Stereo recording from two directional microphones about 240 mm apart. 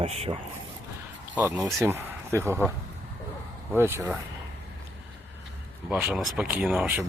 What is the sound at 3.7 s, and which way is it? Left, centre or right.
Speech, centre.